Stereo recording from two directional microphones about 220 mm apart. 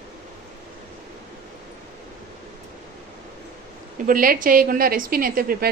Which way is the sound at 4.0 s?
40° right (ahead or behind).